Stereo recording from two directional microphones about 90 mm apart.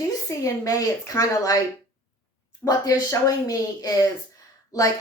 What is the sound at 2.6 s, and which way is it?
A woman's voice, 35° left (ahead or behind).